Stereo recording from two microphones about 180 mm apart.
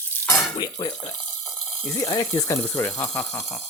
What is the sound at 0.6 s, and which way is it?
Speech, 20° left (ahead or behind).